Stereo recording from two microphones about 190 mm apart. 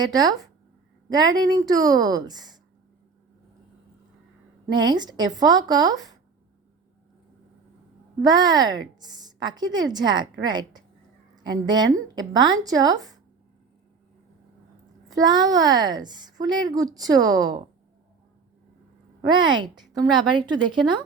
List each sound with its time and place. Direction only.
0.0 s a woman's voice: 20° right (ahead or behind)
4.6 s a woman's voice: 20° right (ahead or behind)
8.2 s a woman's voice: 20° right (ahead or behind)
15.1 s a woman's voice: 20° right (ahead or behind)
19.2 s a woman's voice: 25° right (ahead or behind)